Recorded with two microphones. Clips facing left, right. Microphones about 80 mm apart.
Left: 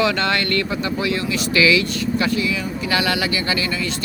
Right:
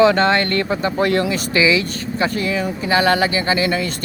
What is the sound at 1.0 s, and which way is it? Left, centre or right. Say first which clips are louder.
Speech: right 8 dB; right.